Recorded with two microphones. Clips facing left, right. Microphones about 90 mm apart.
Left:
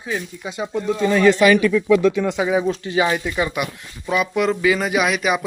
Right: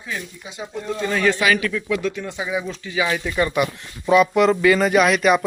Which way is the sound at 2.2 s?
90° left.